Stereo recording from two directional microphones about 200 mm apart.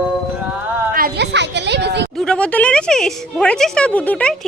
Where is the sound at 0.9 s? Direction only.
50° right (ahead or behind).